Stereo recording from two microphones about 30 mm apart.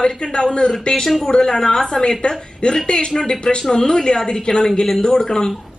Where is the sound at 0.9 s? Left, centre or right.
Left.